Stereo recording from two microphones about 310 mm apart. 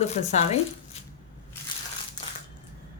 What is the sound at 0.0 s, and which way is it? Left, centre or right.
Speech, left.